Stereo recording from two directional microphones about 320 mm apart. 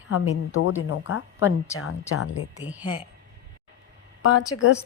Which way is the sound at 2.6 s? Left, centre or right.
Centre.